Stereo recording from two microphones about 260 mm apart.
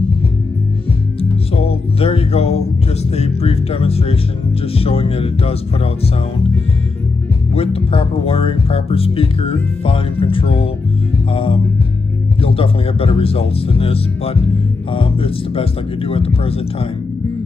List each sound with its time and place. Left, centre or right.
1.5 s music: left
3.2 s speech: left
7.5 s speech: left